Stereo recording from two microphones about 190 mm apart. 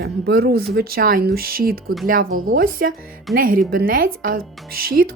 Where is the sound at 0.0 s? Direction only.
55° right (ahead or behind).